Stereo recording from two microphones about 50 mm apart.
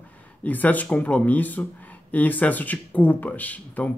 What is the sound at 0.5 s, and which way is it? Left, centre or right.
Speech, left.